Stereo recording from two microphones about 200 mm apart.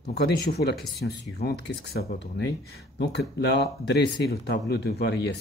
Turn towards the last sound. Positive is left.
turn(degrees=55)  # may be behind; listen again after turning